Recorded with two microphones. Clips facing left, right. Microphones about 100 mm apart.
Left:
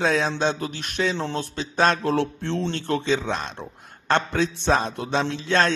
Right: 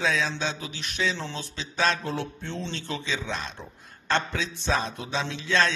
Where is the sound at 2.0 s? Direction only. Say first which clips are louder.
Left 8 dB; 75° left (ahead or behind).